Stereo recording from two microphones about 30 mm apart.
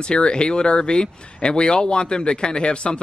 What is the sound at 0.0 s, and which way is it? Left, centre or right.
Speech, left.